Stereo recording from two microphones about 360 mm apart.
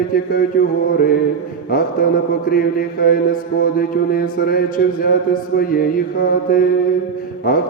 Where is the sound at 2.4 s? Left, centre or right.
Left.